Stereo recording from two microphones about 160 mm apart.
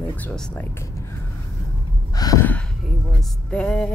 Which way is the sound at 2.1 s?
20° left (ahead or behind).